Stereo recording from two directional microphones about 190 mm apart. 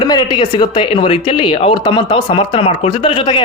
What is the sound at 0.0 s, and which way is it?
Speech, 25° left (ahead or behind).